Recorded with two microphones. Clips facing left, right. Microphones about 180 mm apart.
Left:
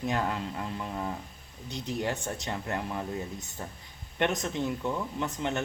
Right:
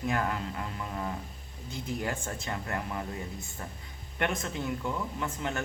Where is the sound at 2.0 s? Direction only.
20° left (ahead or behind).